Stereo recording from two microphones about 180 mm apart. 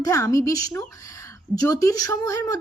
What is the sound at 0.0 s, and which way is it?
A woman's voice, 15° left (ahead or behind).